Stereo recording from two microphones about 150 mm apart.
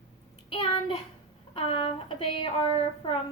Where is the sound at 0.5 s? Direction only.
40° left (ahead or behind).